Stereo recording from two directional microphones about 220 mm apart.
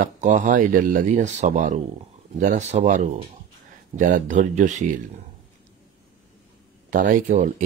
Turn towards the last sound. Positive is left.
turn(degrees=-35)  # may be behind; listen again after turning